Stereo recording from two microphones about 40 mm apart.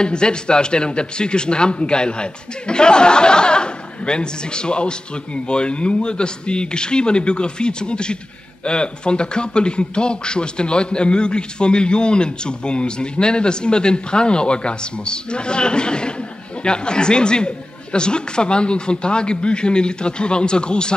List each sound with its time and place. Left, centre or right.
0.0 s a man's voice: left